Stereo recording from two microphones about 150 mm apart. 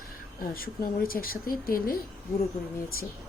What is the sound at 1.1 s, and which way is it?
Speech, 75° left (ahead or behind).